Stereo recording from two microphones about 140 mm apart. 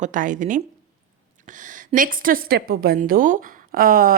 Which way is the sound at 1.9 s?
85° right.